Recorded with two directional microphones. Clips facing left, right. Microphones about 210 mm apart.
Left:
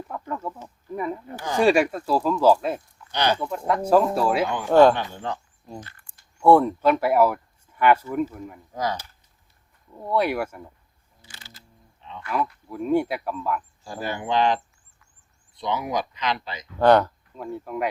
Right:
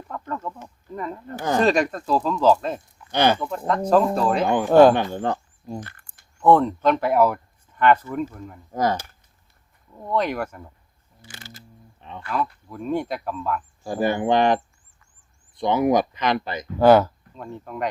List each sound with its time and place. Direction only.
0.1 s a sound: 10° left (ahead or behind)
1.5 s speech: 10° left (ahead or behind)
3.1 s speech: 50° right (ahead or behind)
3.7 s speech: 10° left (ahead or behind)
4.9 s speech: 55° right (ahead or behind)
5.8 s a sound: 55° right (ahead or behind)
6.4 s speech: 10° left (ahead or behind)
8.7 s speech: 50° right (ahead or behind)
10.0 s speech: 10° left (ahead or behind)
11.2 s a sound: 50° right (ahead or behind)
12.6 s speech: 10° left (ahead or behind)
13.8 s speech: 55° right (ahead or behind)
16.7 s speech: 5° right (ahead or behind)
17.3 s speech: 5° left (ahead or behind)